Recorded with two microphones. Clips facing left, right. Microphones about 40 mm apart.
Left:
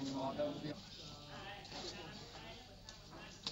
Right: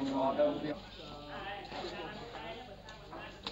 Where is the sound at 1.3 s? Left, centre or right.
Right.